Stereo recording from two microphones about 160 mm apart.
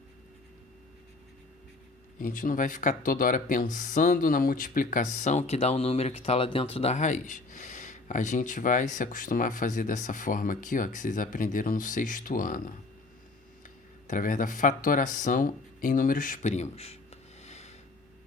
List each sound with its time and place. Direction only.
2.1 s speech: 60° left (ahead or behind)
14.1 s speech: 55° left (ahead or behind)
17.4 s a sound: 45° left (ahead or behind)